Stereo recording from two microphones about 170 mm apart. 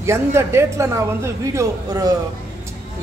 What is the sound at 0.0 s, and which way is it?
A woman's voice, 15° right (ahead or behind).